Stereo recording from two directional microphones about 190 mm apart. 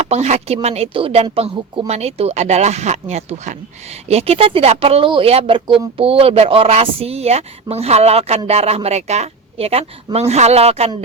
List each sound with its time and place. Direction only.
0.1 s speech: 35° right (ahead or behind)